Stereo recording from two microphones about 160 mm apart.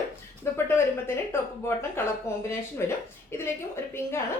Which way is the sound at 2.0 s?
15° left (ahead or behind).